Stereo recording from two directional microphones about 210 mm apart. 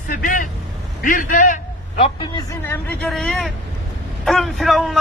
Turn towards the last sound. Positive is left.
turn(degrees=0)  # may be behind; listen again after turning